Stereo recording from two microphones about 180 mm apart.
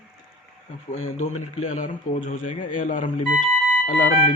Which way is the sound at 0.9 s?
40° left (ahead or behind).